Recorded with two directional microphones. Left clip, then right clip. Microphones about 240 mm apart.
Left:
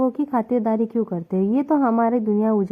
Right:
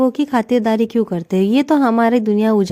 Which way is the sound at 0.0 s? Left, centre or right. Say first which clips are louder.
Right 5 dB; right.